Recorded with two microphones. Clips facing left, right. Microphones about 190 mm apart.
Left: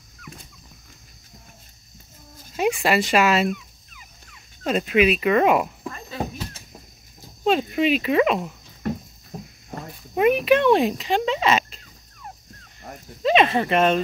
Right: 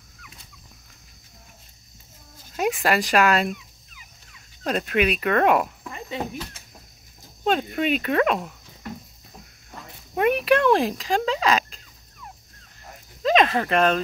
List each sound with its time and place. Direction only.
2.5 s speech: centre (ahead or behind)
3.5 s dog: 55° left (ahead or behind)
4.6 s speech: centre (ahead or behind)
5.9 s insect: 20° right (ahead or behind)
7.4 s speech: 5° left (ahead or behind)
9.3 s cricket: 35° left (ahead or behind)
10.1 s speech: centre (ahead or behind)
13.2 s a sound: 5° left (ahead or behind)